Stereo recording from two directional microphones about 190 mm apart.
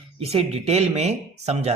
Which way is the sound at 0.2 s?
30° right (ahead or behind).